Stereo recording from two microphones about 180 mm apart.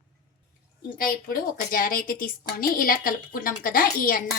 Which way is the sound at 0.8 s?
55° left (ahead or behind).